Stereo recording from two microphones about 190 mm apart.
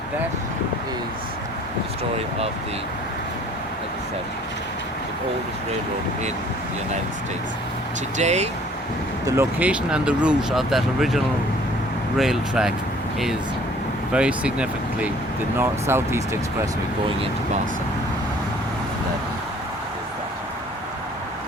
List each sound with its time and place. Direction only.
8.2 s speech: 35° right (ahead or behind)
9.2 s speech: 15° right (ahead or behind)
14.1 s speech: 5° right (ahead or behind)